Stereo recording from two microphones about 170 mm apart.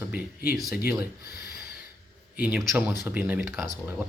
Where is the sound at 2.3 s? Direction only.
10° right (ahead or behind).